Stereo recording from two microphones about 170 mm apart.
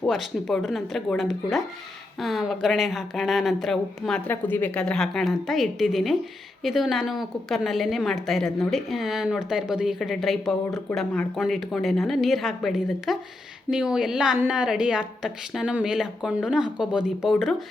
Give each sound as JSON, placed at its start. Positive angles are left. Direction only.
{"t": 0.1, "sound": "speech", "side_deg": 0}